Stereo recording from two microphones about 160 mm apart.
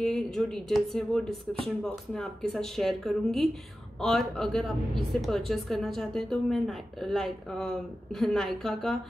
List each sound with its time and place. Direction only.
0.0 s a woman's voice: centre (ahead or behind)